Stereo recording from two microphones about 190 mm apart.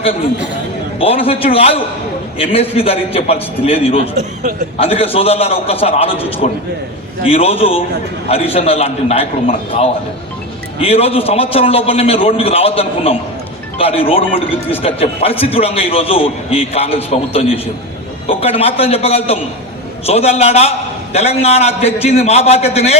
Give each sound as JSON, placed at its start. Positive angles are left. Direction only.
{"t": 0.9, "sound": "a man's voice", "side_deg": 30}
{"t": 10.8, "sound": "speech", "side_deg": 30}